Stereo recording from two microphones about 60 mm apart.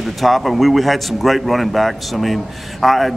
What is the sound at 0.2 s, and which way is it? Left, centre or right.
Speech, centre.